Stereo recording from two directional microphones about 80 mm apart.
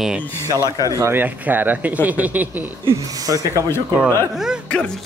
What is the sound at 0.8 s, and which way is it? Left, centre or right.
Speech, right.